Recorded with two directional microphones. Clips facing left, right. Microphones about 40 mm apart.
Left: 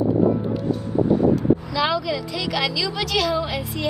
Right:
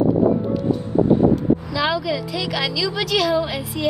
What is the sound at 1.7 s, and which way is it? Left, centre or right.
A woman's voice, centre.